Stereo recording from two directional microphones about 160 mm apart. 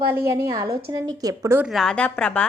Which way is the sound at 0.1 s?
15° right (ahead or behind).